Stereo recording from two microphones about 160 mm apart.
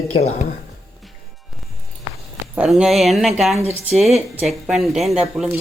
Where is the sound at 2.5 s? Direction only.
5° right (ahead or behind).